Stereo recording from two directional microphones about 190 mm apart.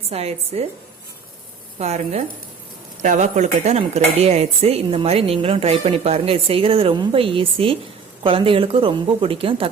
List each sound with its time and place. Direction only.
0.1 s speech: 35° right (ahead or behind)
1.8 s a woman's voice: 35° right (ahead or behind)